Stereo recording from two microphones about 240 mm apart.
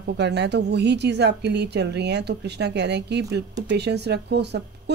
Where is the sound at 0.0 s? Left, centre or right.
Right.